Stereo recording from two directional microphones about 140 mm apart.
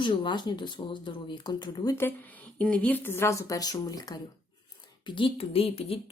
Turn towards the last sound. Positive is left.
turn(degrees=45)  # may be behind; listen again after turning